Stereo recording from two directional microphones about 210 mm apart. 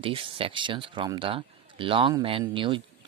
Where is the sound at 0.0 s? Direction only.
25° right (ahead or behind).